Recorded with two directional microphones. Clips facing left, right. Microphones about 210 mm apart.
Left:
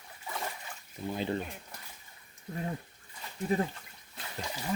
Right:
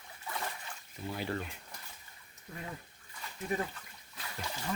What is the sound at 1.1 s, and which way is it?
Speech, 20° left (ahead or behind).